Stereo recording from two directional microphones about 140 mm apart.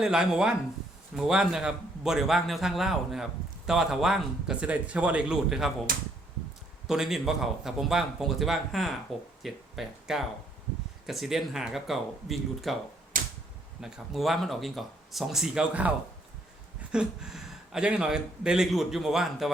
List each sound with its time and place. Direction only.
0.0 s a man's voice: 5° right (ahead or behind)
6.8 s a man's voice: 5° right (ahead or behind)
13.1 s typewriter: 80° right
13.8 s a man's voice: 5° right (ahead or behind)
16.9 s a man's voice: 5° right (ahead or behind)